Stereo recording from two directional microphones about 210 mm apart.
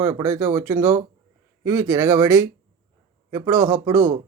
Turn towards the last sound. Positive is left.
turn(degrees=-15)  # may be behind; listen again after turning